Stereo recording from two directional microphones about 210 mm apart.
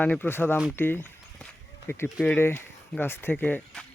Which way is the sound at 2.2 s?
10° left (ahead or behind).